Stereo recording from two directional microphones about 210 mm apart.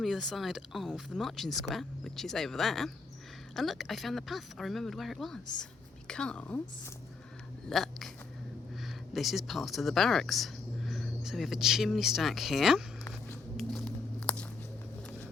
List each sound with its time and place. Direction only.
0.0 s speech: centre (ahead or behind)
7.7 s chewing: centre (ahead or behind)
8.7 s speech: centre (ahead or behind)
13.1 s a sound: 5° left (ahead or behind)
14.2 s walk: 5° left (ahead or behind)